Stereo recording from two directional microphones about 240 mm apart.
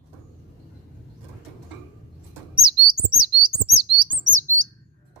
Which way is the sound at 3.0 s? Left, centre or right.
Right.